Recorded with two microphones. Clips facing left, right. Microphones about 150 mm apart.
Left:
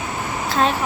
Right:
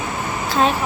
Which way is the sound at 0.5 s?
Centre (ahead or behind).